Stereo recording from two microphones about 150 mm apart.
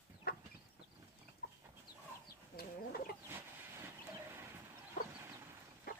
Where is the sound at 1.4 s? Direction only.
90° left.